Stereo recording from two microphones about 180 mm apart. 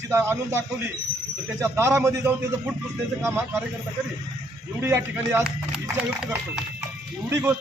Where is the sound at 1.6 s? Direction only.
15° right (ahead or behind).